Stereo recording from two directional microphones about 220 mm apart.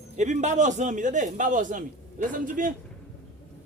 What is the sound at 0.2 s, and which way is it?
Speech, 30° right (ahead or behind).